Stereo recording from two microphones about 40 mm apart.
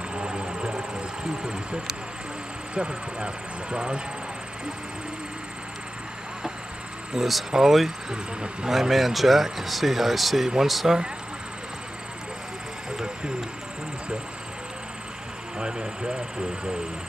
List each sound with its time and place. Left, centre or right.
0.1 s vehicle: right
1.4 s speech: right
7.2 s speech: centre
12.9 s vehicle: right
15.6 s speech: right